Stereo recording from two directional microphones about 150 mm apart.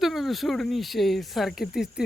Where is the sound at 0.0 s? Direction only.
Centre (ahead or behind).